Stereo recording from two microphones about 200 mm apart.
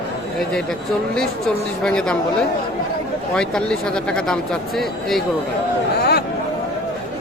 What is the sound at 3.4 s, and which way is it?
Speech, 5° left (ahead or behind).